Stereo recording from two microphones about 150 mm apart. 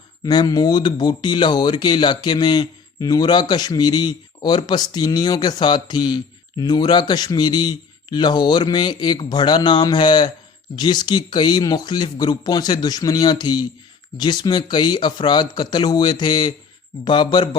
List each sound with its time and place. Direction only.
0.3 s a man's voice: 25° left (ahead or behind)